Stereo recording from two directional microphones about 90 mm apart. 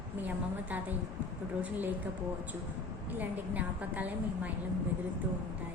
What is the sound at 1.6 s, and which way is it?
Speech, 20° right (ahead or behind).